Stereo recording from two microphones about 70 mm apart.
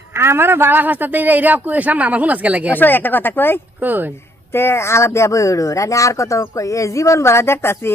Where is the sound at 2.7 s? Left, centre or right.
Left.